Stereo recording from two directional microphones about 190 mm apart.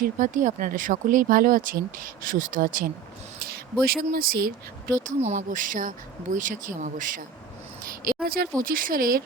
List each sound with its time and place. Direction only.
0.0 s speech: 45° right (ahead or behind)
7.9 s a sound: 50° right (ahead or behind)
8.6 s speech: 50° right (ahead or behind)